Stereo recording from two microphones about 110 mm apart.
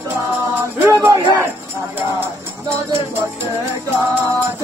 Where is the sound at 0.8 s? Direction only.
15° right (ahead or behind).